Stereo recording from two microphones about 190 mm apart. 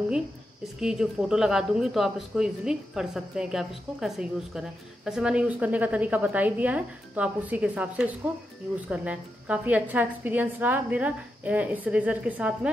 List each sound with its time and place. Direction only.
0.7 s a woman's voice: 5° right (ahead or behind)